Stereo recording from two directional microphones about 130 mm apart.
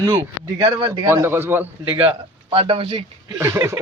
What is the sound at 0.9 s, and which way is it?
Speech, 25° right (ahead or behind).